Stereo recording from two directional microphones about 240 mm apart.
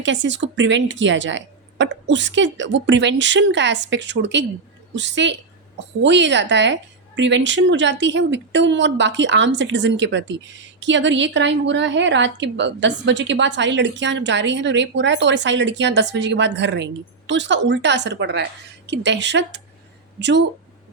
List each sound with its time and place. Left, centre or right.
0.0 s speech: right